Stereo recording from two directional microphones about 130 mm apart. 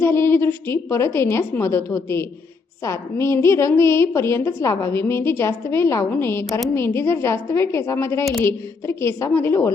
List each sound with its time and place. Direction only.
0.0 s a woman's voice: 20° left (ahead or behind)